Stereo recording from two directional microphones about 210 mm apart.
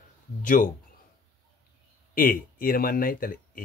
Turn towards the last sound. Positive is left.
turn(degrees=40)  # may be behind; listen again after turning